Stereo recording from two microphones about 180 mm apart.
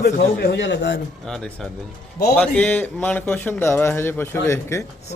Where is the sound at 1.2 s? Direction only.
5° left (ahead or behind).